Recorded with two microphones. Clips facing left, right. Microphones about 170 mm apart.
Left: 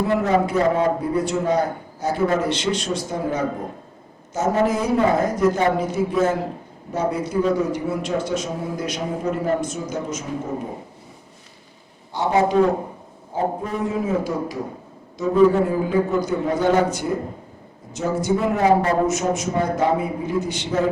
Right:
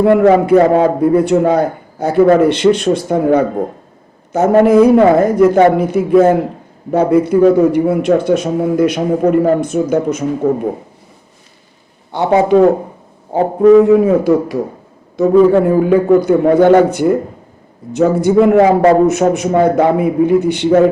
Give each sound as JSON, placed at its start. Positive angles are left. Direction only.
{"t": 0.0, "sound": "a man's voice", "side_deg": -65}
{"t": 12.1, "sound": "a man's voice", "side_deg": -60}